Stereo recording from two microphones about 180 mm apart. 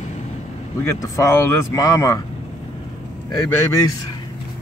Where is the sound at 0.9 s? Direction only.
15° left (ahead or behind).